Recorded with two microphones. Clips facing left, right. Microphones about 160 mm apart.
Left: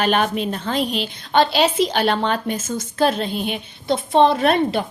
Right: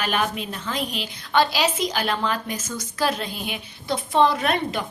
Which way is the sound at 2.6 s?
50° left (ahead or behind).